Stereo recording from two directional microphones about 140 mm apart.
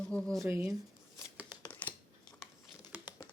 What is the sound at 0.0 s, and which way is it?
Speech, 5° left (ahead or behind).